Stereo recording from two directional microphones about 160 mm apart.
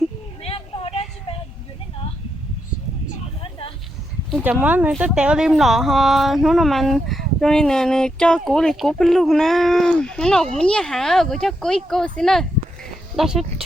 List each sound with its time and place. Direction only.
0.4 s vehicle: 35° left (ahead or behind)
4.3 s speech: 10° right (ahead or behind)